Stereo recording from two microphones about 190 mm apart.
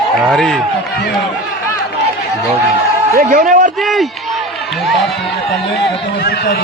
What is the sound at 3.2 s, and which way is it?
Speech, 50° right (ahead or behind).